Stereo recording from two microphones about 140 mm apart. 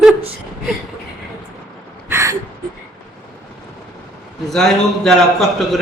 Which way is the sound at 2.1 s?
25° right (ahead or behind).